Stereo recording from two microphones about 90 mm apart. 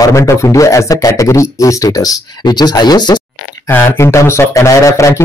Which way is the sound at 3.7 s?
30° left (ahead or behind).